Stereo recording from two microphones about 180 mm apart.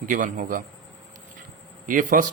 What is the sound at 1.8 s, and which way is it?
Speech, 50° right (ahead or behind).